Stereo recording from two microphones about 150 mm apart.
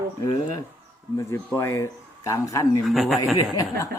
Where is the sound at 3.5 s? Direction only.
20° left (ahead or behind).